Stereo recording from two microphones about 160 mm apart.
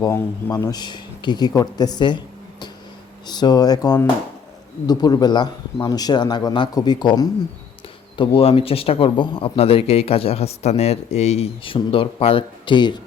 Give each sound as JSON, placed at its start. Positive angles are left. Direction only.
{"t": 0.0, "sound": "a man's voice", "side_deg": 20}